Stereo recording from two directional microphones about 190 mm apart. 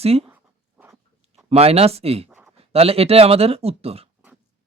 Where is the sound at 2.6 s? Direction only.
30° right (ahead or behind).